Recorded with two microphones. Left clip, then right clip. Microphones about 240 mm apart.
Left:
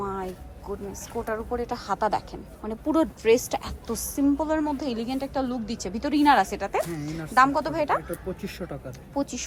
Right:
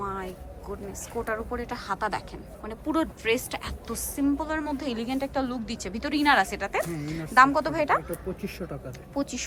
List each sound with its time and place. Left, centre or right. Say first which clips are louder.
0.0 s a woman's voice: left 2 dB; centre
8.4 s speech: left 1 dB; centre
9.1 s a woman's voice: left 2 dB; centre